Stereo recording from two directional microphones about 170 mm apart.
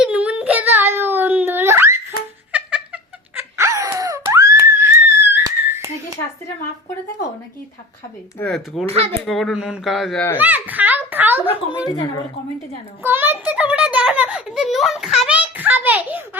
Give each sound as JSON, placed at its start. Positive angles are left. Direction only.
{"t": 0.0, "sound": "a sound", "side_deg": -10}
{"t": 2.5, "sound": "cat", "side_deg": -5}
{"t": 8.4, "sound": "speech", "side_deg": 0}
{"t": 10.3, "sound": "a child's voice", "side_deg": -10}
{"t": 11.9, "sound": "a woman's voice", "side_deg": 20}
{"t": 13.0, "sound": "a child's voice", "side_deg": -10}